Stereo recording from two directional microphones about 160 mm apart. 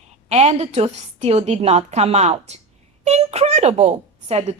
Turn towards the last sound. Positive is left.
turn(degrees=-40)  # may be behind; listen again after turning